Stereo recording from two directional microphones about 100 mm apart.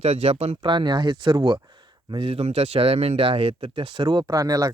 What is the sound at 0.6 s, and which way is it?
Speech, 50° right (ahead or behind).